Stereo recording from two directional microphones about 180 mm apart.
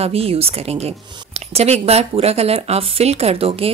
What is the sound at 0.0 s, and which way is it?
A woman's voice, 35° right (ahead or behind).